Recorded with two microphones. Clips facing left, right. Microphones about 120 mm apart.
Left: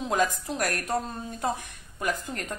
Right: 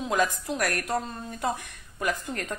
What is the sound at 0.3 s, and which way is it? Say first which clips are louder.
Speech: right 1 dB; 40° left (ahead or behind).